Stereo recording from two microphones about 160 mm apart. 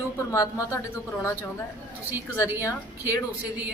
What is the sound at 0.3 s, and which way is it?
A woman's voice, 20° left (ahead or behind).